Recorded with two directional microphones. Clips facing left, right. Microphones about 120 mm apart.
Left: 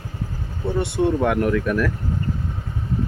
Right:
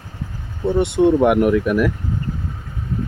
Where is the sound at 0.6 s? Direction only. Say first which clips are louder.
Right 6 dB; 20° right (ahead or behind).